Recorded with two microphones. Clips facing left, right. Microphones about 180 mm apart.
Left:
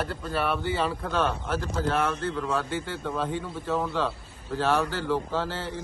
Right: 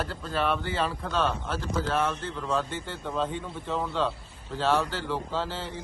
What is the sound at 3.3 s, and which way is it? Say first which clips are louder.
A man's voice: left 3 dB; 10° left (ahead or behind).